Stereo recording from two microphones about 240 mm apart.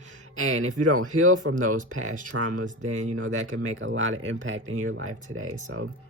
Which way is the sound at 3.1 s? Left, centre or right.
Right.